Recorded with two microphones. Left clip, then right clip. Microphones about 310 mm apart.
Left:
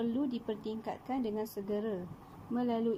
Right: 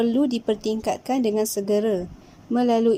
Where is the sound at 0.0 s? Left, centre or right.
Right.